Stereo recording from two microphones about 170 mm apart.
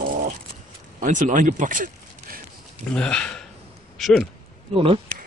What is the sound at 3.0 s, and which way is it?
Speech, 5° left (ahead or behind).